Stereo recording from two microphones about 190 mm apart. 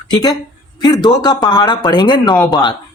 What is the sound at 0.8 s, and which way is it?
A man's voice, 20° left (ahead or behind).